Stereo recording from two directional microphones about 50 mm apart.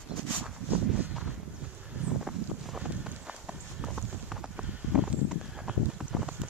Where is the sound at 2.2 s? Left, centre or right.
Centre.